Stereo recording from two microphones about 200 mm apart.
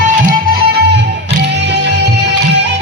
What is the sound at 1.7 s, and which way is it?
Music, 60° right (ahead or behind).